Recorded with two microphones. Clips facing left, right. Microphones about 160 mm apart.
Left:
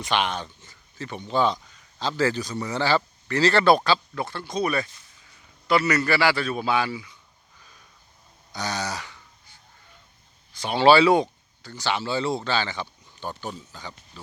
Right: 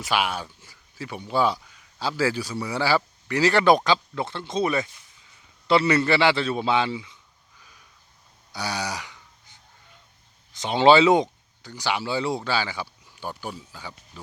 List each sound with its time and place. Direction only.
0.0 s a man's voice: 5° right (ahead or behind); by 7.2 s 20° right (ahead or behind)
8.5 s a sound: 10° right (ahead or behind)
10.5 s speech: 20° right (ahead or behind)